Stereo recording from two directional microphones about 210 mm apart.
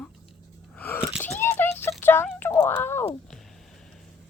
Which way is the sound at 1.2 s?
10° left (ahead or behind).